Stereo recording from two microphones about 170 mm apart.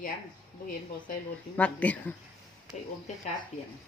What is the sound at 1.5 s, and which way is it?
Speech, 10° left (ahead or behind).